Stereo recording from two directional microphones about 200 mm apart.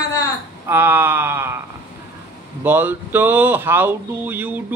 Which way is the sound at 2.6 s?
10° right (ahead or behind).